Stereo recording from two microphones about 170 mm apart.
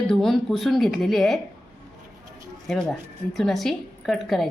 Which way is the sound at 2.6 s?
Centre (ahead or behind).